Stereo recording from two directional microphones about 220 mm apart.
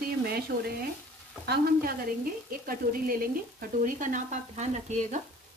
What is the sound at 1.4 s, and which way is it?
Speech, 45° right (ahead or behind).